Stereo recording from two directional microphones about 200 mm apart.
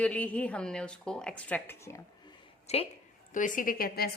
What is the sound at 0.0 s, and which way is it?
Speech, 5° left (ahead or behind).